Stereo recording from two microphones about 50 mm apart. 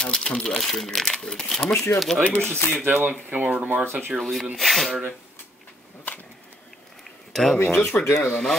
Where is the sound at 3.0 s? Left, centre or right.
Right.